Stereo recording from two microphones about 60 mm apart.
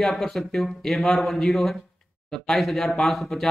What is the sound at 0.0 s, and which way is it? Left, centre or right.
Speech, centre.